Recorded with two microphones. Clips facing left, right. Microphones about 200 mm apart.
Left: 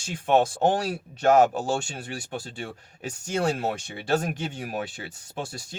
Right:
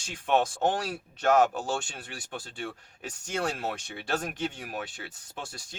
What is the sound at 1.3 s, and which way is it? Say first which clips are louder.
Speech: left 3 dB; 30° left (ahead or behind).